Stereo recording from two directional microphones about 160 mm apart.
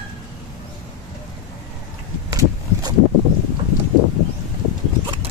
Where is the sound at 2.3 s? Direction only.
20° right (ahead or behind).